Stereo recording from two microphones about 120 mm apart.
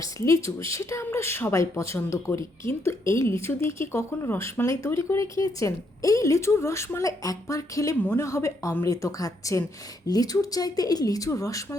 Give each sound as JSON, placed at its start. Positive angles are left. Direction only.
{"t": 0.0, "sound": "speech", "side_deg": 25}